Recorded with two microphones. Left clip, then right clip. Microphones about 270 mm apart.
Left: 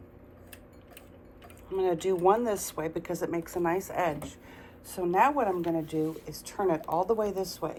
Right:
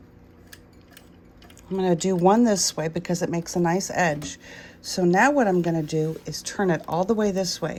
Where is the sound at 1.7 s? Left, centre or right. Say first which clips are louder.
Right 4 dB; right.